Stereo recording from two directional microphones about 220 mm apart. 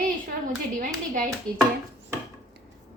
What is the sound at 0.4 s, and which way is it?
Speech, 35° right (ahead or behind).